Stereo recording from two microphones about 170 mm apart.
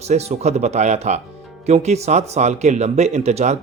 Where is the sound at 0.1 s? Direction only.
40° right (ahead or behind).